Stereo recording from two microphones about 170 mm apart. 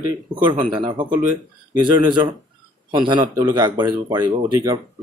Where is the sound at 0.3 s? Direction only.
30° right (ahead or behind).